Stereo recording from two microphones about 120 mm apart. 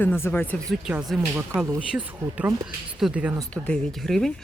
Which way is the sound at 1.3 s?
5° right (ahead or behind).